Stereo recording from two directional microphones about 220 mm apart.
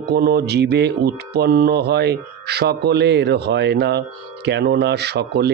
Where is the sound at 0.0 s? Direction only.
45° right (ahead or behind).